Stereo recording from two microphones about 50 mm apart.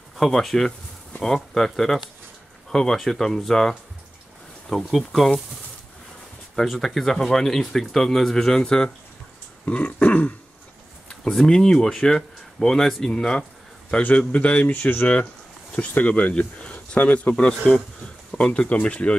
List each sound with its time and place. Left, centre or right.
0.2 s speech: centre
6.5 s speech: centre
9.8 s throat clearing: left
11.1 s speech: centre
13.8 s a man's voice: left
15.8 s throat clearing: left
16.1 s a man's voice: left